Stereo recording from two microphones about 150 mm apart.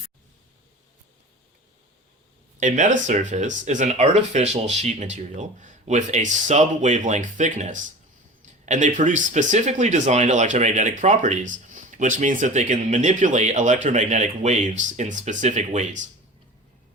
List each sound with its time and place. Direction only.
2.6 s speech: 55° right (ahead or behind)